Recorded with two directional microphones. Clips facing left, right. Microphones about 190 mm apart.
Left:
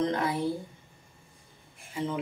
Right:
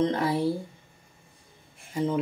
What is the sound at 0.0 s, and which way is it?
Speech, 30° right (ahead or behind).